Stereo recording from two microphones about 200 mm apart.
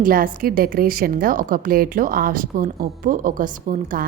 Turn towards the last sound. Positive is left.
turn(degrees=-45)  # may be behind; listen again after turning